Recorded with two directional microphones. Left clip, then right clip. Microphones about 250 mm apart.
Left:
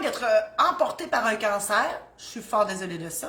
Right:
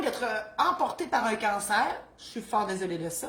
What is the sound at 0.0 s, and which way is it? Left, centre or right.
A woman's voice, centre.